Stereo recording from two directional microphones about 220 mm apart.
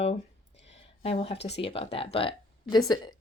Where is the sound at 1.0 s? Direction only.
25° left (ahead or behind).